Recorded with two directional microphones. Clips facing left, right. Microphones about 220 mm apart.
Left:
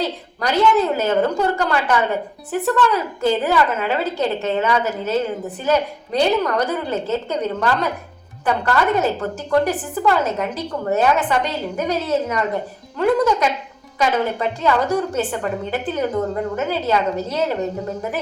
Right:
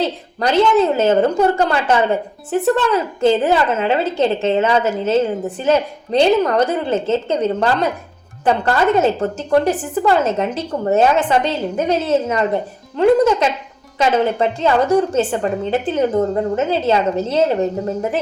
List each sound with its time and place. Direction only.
0.0 s a woman's voice: 25° right (ahead or behind)